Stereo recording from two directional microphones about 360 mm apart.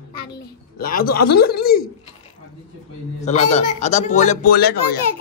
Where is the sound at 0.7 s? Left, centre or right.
Left.